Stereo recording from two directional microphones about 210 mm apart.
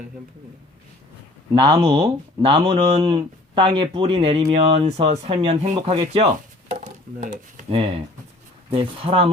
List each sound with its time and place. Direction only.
1.5 s speech: 25° right (ahead or behind)